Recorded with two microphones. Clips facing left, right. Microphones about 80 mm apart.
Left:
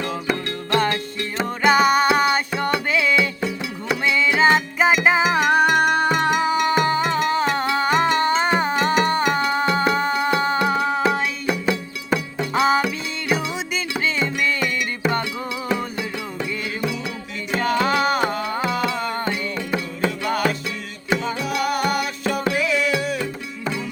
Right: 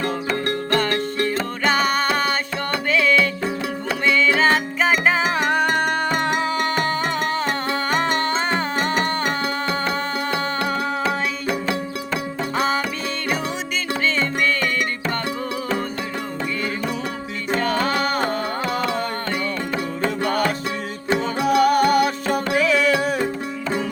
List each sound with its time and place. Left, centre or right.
0.7 s music: centre
17.5 s music: centre
20.1 s music: right